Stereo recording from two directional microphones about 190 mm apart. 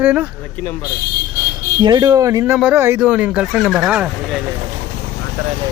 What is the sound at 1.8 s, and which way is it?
Speech, 20° right (ahead or behind).